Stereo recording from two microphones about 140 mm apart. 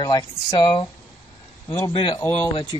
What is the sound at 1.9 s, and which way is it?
Speech, 35° left (ahead or behind).